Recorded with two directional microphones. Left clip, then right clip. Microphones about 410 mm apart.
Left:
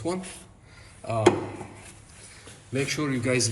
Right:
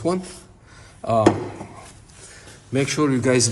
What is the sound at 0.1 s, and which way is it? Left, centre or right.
Speech, right.